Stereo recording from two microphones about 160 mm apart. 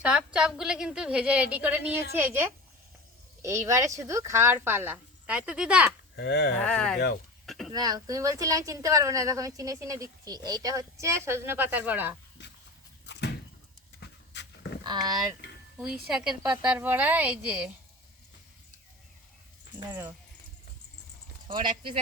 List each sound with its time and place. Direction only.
0.0 s a woman's voice: 5° right (ahead or behind)
6.1 s speech: 90° left
6.6 s speech: 5° left (ahead or behind)
7.4 s a sound: centre (ahead or behind)
7.7 s speech: 25° right (ahead or behind)
12.4 s a sound: 90° left
13.1 s door: 90° left
14.0 s a sound: 90° left
14.8 s speech: 25° right (ahead or behind)
16.6 s speech: 10° right (ahead or behind)
19.9 s speech: 15° right (ahead or behind)
21.4 s speech: 30° right (ahead or behind)